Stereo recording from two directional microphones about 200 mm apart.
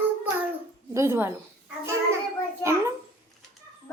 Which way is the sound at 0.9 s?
10° right (ahead or behind).